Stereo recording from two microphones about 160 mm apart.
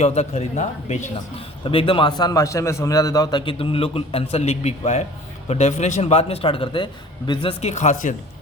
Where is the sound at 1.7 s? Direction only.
35° left (ahead or behind).